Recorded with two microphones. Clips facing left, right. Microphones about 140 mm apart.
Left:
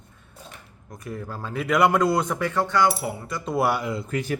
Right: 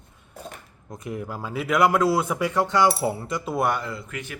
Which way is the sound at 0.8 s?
20° right (ahead or behind).